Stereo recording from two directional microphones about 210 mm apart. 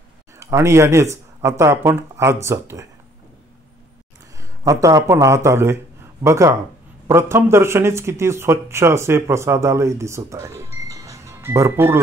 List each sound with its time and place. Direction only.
0.4 s speech: 15° right (ahead or behind)
4.4 s speech: 15° right (ahead or behind)